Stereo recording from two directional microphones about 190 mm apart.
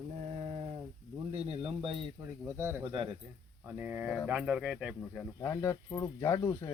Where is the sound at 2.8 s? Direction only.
30° right (ahead or behind).